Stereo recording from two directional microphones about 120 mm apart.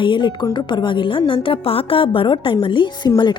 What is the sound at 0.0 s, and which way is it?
A woman's voice, 45° left (ahead or behind).